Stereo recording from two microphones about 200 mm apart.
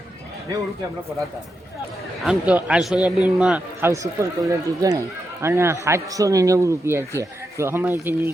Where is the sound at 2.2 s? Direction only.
5° right (ahead or behind).